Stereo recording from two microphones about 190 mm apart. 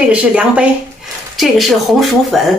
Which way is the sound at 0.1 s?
5° right (ahead or behind).